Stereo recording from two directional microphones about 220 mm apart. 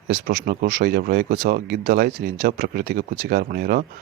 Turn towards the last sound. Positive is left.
turn(degrees=-40)  # may be behind; listen again after turning